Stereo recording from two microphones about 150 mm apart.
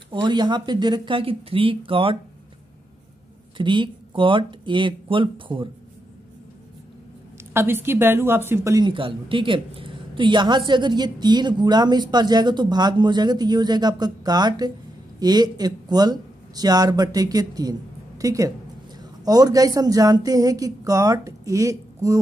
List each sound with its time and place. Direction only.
0.1 s speech: 30° right (ahead or behind)
3.5 s speech: 30° right (ahead or behind)
7.5 s a woman's voice: 15° right (ahead or behind)
8.8 s a woman's voice: 35° right (ahead or behind)